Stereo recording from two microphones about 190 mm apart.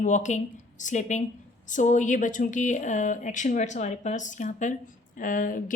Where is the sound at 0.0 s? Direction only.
40° left (ahead or behind).